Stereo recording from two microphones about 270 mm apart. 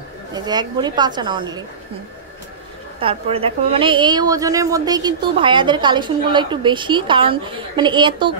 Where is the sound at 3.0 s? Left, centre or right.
Right.